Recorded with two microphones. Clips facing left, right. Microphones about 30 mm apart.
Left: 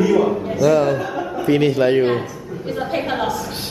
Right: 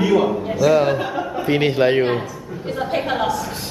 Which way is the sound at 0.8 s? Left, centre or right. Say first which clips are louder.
Even; right.